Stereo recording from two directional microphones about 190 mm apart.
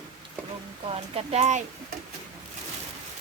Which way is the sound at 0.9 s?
35° right (ahead or behind).